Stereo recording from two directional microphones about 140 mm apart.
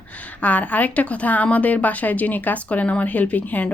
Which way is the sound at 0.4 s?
10° left (ahead or behind).